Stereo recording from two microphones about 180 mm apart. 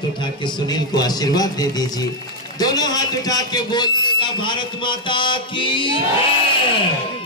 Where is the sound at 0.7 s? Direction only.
20° left (ahead or behind).